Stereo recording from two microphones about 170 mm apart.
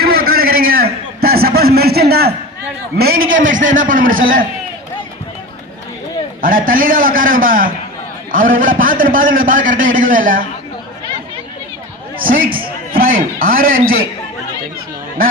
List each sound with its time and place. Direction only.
0.0 s a sound: 60° right (ahead or behind)
3.0 s a man's voice: 60° right (ahead or behind)
6.4 s a man's voice: 55° right (ahead or behind)
12.2 s a man's voice: 55° right (ahead or behind)